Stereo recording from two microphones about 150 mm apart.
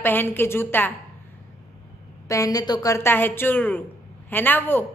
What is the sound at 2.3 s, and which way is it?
A woman's voice, 25° left (ahead or behind).